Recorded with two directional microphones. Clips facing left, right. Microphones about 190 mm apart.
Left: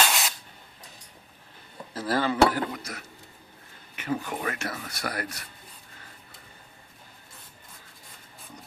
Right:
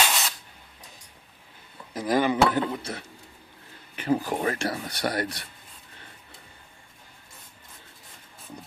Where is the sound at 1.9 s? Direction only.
15° right (ahead or behind).